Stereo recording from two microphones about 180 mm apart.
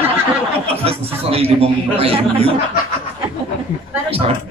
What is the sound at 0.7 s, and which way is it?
A man's voice, 35° right (ahead or behind).